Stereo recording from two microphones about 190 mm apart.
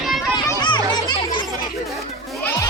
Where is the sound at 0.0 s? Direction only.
Centre (ahead or behind).